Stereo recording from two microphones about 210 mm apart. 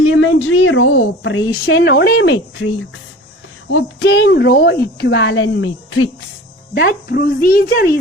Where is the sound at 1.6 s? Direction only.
50° left (ahead or behind); by 2.7 s 70° left (ahead or behind).